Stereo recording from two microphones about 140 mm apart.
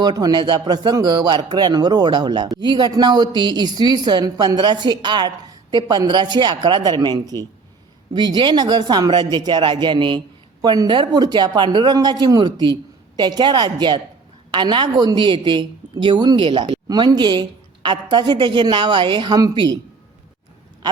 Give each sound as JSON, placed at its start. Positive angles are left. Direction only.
{"t": 0.0, "sound": "a man's voice", "side_deg": -30}